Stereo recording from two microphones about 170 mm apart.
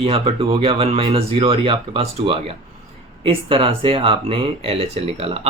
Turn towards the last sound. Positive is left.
turn(degrees=-35)  # may be behind; listen again after turning